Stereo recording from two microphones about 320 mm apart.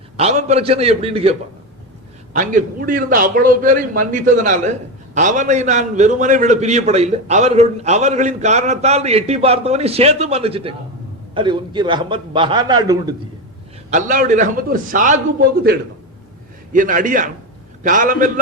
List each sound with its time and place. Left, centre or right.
0.2 s a man's voice: centre
13.9 s a man's voice: right